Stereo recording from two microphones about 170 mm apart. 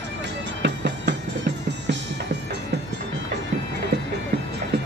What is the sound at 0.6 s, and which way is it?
Music, 90° right.